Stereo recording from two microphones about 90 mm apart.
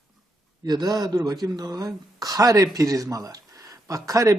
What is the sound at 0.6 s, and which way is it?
Speech, 50° right (ahead or behind).